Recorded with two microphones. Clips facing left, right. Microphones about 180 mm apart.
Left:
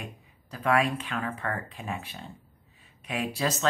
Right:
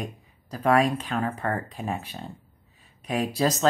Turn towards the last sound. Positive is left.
turn(degrees=-40)  # may be behind; listen again after turning